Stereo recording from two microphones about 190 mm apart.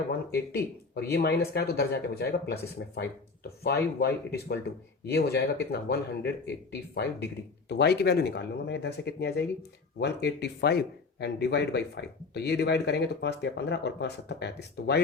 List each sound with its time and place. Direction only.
0.3 s speech: 55° left (ahead or behind)